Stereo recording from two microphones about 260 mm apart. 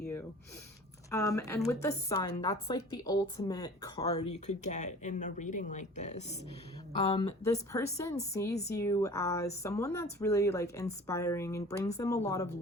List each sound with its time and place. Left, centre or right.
1.1 s a woman's voice: centre
4.2 s speech: left
7.1 s a woman's voice: centre